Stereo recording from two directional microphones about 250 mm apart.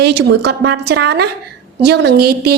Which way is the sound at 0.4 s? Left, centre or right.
Right.